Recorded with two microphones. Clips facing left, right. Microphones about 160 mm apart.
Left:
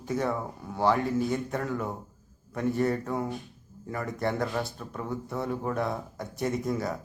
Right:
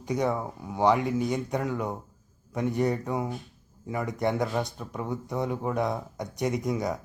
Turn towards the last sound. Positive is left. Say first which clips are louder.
# right 1 dB
turn(degrees=-15)  # may be behind; listen again after turning